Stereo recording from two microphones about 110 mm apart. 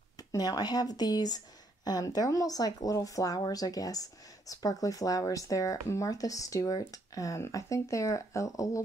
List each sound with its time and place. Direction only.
0.3 s speech: 35° left (ahead or behind)